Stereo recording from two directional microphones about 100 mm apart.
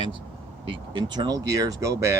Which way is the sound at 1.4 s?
35° right (ahead or behind).